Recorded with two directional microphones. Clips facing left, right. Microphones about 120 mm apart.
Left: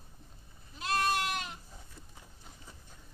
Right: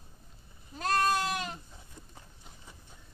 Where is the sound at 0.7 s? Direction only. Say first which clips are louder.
Right 3 dB; 45° right (ahead or behind).